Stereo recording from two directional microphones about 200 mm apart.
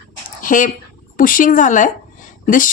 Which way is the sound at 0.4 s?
40° left (ahead or behind).